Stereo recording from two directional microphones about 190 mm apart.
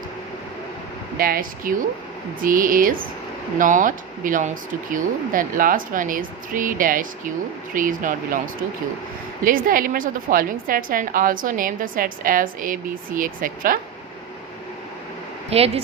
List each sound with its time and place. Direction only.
1.2 s a woman's voice: 50° right (ahead or behind)
9.4 s a woman's voice: 45° right (ahead or behind)
15.4 s speech: 30° right (ahead or behind)